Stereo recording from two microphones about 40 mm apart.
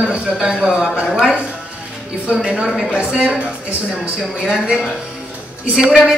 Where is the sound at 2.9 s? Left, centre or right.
Right.